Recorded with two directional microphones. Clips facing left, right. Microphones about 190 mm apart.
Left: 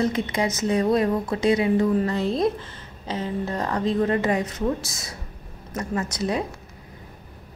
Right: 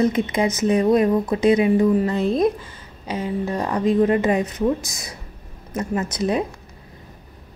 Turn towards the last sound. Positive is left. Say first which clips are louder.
# right 4 dB
turn(degrees=-20)  # may be behind; listen again after turning